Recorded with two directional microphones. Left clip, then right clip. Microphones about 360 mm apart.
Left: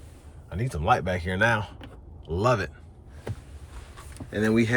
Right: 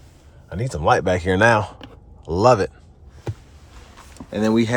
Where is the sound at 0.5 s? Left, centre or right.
Centre.